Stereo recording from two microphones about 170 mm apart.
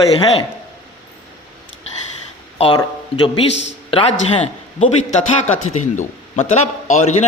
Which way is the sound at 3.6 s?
35° left (ahead or behind).